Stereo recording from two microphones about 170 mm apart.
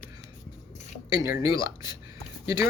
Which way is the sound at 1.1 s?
20° right (ahead or behind).